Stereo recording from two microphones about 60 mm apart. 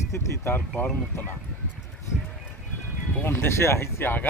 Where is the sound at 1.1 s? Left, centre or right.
Left.